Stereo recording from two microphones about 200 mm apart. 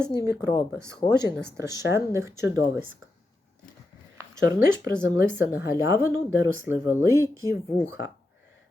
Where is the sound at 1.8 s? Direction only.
15° right (ahead or behind).